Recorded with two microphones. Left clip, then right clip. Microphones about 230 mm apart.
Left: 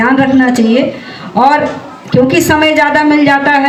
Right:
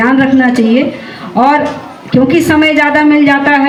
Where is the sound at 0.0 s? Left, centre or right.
Left.